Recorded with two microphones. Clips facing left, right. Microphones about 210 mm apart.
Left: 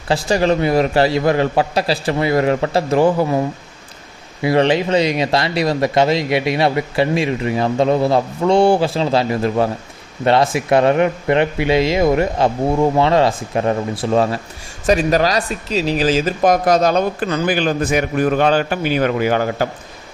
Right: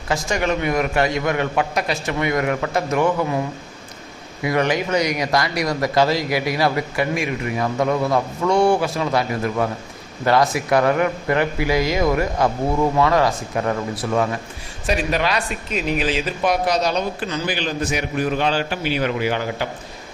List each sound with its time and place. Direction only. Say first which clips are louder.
0.1 s a man's voice: left 6 dB; 30° left (ahead or behind)
4.4 s speech: left 5 dB; 30° left (ahead or behind)
14.8 s speech: left 6 dB; 40° left (ahead or behind)